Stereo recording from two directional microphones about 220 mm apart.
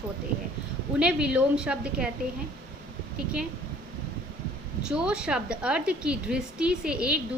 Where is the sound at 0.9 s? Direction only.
5° right (ahead or behind).